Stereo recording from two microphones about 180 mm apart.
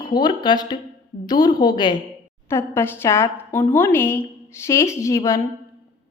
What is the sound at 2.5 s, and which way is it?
A woman's voice, 15° left (ahead or behind).